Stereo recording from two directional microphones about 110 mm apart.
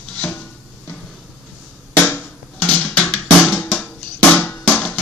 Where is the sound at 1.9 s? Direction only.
15° left (ahead or behind).